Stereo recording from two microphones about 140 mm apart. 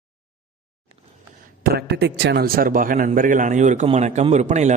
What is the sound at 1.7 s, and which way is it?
A man's voice, 90° right.